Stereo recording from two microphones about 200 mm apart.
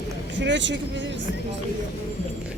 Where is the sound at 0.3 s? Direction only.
65° right (ahead or behind).